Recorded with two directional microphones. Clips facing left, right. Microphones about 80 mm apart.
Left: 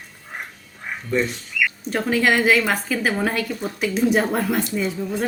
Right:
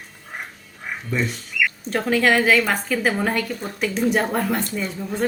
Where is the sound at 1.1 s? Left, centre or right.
Centre.